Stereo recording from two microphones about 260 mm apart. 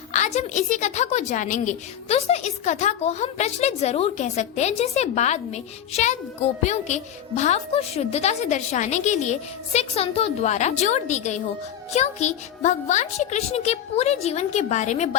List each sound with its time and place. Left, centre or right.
0.1 s a woman's voice: left